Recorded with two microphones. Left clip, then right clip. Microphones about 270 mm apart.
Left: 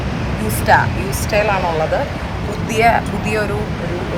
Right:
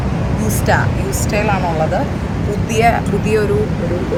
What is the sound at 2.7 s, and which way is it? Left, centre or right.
Speech, centre.